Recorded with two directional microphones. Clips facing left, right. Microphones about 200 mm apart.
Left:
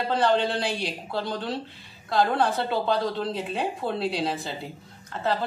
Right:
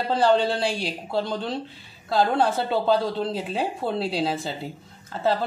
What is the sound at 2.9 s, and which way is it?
Speech, 30° right (ahead or behind).